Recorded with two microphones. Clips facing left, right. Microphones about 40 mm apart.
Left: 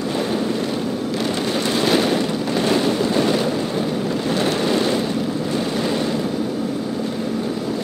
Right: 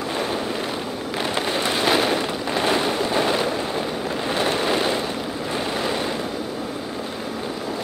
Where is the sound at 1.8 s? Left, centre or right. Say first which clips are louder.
Left 2 dB; centre.